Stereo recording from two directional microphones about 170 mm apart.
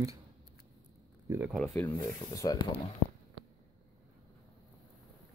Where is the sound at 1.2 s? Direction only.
15° right (ahead or behind).